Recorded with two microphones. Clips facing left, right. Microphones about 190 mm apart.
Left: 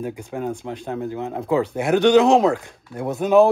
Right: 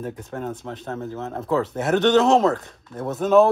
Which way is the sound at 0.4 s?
Centre (ahead or behind).